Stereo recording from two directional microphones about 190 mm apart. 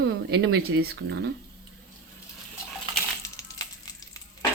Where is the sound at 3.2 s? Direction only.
20° left (ahead or behind).